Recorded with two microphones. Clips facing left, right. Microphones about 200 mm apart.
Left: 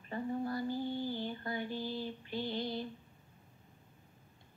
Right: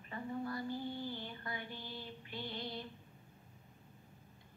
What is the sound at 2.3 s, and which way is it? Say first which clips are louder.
Female singing: left 7 dB; 30° left (ahead or behind).